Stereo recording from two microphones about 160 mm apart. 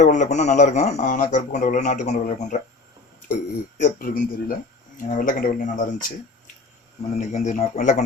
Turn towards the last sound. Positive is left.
turn(degrees=50)  # may be behind; listen again after turning